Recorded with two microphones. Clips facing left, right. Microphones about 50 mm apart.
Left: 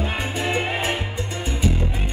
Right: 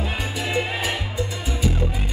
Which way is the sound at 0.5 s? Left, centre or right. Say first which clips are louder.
Left 1 dB; left.